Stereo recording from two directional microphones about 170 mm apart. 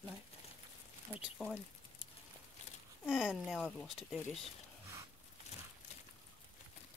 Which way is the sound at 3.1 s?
5° right (ahead or behind).